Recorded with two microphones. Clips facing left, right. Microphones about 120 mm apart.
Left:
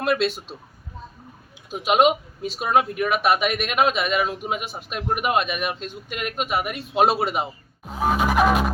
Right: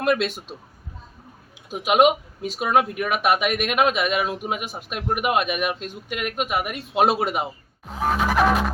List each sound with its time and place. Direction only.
0.2 s a man's voice: 35° left (ahead or behind)
1.7 s speech: 5° right (ahead or behind)